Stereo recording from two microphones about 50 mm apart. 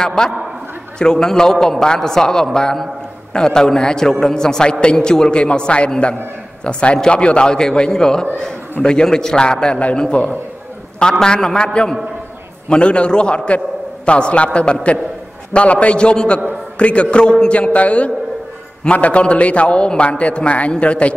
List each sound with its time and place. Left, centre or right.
0.0 s a man's voice: centre